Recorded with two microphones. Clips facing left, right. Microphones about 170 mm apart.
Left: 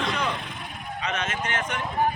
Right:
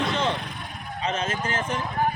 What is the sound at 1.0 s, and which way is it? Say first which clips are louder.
Speech: right 2 dB; 30° right (ahead or behind).